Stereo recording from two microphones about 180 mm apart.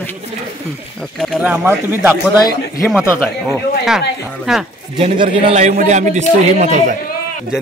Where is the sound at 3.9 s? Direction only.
Centre (ahead or behind).